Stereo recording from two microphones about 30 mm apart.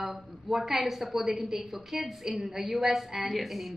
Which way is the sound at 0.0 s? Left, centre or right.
Centre.